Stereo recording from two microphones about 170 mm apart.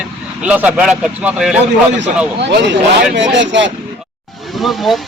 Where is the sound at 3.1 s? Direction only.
90° right.